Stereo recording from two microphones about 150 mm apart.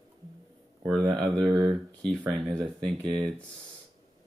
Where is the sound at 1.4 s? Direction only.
Centre (ahead or behind).